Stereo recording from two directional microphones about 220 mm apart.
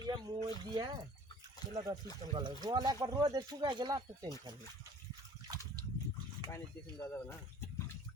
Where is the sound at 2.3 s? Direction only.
20° right (ahead or behind).